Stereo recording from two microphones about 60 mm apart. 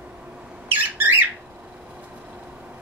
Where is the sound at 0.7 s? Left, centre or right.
Right.